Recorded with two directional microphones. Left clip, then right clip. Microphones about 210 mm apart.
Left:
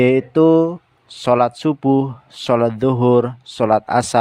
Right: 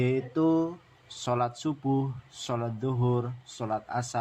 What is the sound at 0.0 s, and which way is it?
Speech, 45° left (ahead or behind).